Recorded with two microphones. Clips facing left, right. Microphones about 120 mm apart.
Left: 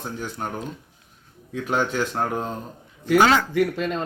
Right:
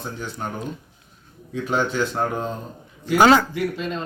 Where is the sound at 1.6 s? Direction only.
10° left (ahead or behind).